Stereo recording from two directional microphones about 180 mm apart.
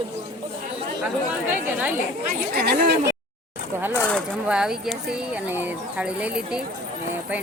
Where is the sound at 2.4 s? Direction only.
60° right (ahead or behind).